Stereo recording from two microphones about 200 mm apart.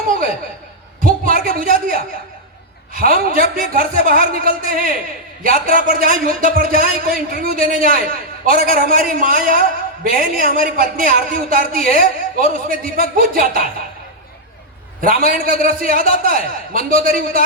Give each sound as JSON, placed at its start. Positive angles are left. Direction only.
{"t": 1.0, "sound": "a sound", "side_deg": -45}
{"t": 2.9, "sound": "speech", "side_deg": -45}
{"t": 15.0, "sound": "speech", "side_deg": -45}